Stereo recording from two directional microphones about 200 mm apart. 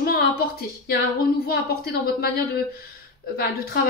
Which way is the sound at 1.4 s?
50° left (ahead or behind).